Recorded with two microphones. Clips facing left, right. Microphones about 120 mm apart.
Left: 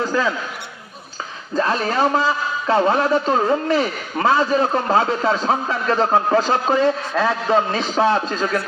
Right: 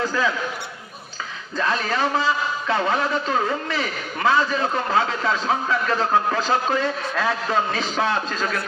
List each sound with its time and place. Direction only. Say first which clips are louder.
1.5 s a man's voice: left 4 dB; 35° left (ahead or behind)